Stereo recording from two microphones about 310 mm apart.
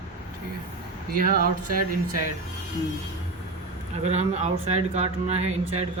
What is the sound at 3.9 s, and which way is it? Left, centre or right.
Speech, right.